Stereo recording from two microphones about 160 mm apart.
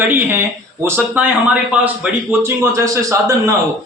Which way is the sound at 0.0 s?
10° right (ahead or behind).